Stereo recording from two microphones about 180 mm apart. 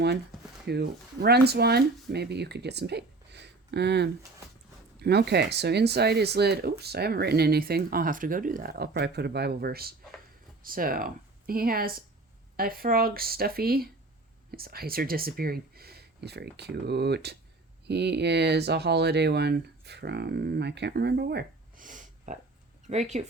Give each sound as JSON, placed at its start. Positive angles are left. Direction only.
{"t": 0.6, "sound": "speech", "side_deg": -65}